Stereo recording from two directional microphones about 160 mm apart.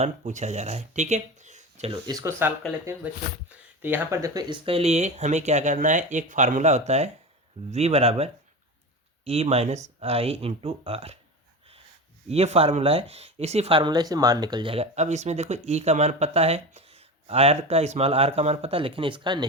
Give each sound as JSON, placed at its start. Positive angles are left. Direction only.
{"t": 0.0, "sound": "speech", "side_deg": -45}
{"t": 2.0, "sound": "speech", "side_deg": -20}
{"t": 4.6, "sound": "speech", "side_deg": -40}
{"t": 12.3, "sound": "speech", "side_deg": -40}